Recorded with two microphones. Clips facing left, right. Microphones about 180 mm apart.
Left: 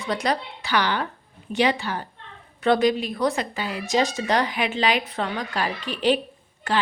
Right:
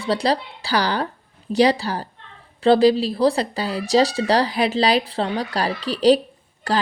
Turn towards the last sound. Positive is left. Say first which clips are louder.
# right 2 dB
turn(degrees=-35)  # may be behind; listen again after turning